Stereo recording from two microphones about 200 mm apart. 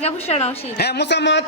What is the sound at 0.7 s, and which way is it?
Speech, 55° left (ahead or behind).